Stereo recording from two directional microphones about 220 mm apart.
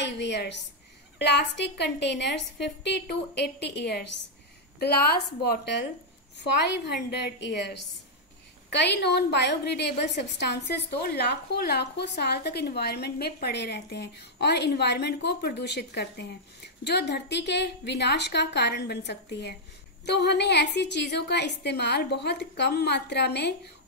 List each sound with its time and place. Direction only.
0.0 s a woman's voice: 50° left (ahead or behind)
8.7 s a woman's voice: 50° left (ahead or behind)